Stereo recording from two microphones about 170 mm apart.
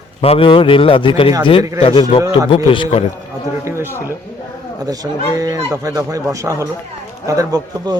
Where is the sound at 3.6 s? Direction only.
15° right (ahead or behind).